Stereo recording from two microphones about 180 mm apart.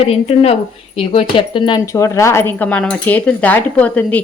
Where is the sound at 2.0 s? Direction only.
15° left (ahead or behind).